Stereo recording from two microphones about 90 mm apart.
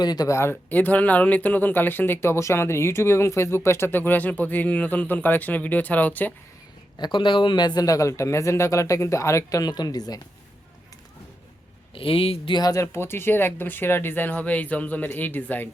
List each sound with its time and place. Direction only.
0.0 s speech: 50° left (ahead or behind)
0.3 s speech: 30° left (ahead or behind)
0.7 s speech: 20° left (ahead or behind)
7.0 s speech: 65° left (ahead or behind); by 9.7 s 35° left (ahead or behind)
9.7 s speech: 50° left (ahead or behind)
11.9 s speech: 90° left
12.5 s speech: 45° left (ahead or behind)
12.8 s speech: 30° left (ahead or behind)